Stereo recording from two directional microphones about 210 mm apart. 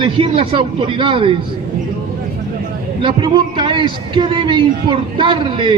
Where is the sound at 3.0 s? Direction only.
20° right (ahead or behind).